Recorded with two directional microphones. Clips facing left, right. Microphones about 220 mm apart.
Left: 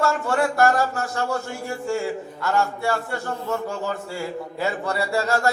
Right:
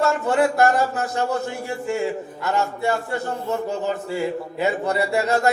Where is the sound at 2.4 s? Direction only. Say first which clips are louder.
Even; 20° right (ahead or behind).